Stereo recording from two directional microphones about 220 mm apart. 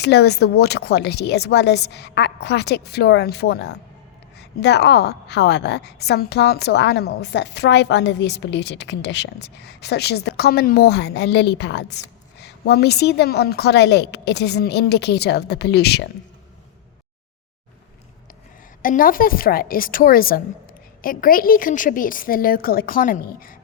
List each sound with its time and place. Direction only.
0.0 s a woman's voice: 50° left (ahead or behind)
18.8 s a woman's voice: 40° left (ahead or behind)